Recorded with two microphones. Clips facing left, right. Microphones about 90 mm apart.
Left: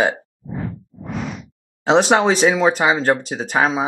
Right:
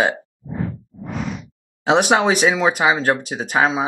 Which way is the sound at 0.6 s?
Centre (ahead or behind).